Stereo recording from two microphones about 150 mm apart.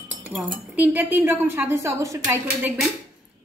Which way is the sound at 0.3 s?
10° right (ahead or behind).